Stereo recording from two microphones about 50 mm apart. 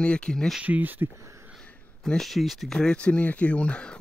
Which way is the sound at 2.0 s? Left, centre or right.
Centre.